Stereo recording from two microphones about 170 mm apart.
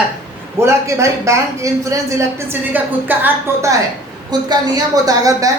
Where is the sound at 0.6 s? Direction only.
15° right (ahead or behind).